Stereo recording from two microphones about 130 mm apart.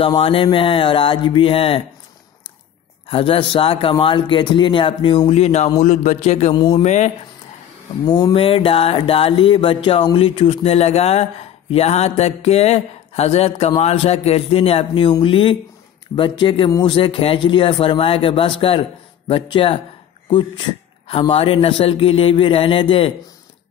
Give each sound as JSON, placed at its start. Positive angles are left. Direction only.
{"t": 0.0, "sound": "music", "side_deg": 45}
{"t": 3.1, "sound": "music", "side_deg": 45}
{"t": 5.8, "sound": "a man's voice", "side_deg": 60}
{"t": 8.0, "sound": "music", "side_deg": 35}
{"t": 15.1, "sound": "speech", "side_deg": 40}
{"t": 16.2, "sound": "music", "side_deg": 40}
{"t": 20.2, "sound": "speech", "side_deg": 40}
{"t": 21.1, "sound": "music", "side_deg": 45}